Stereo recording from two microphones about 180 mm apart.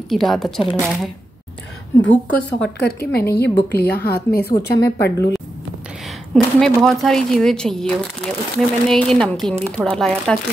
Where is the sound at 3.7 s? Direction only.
60° left (ahead or behind).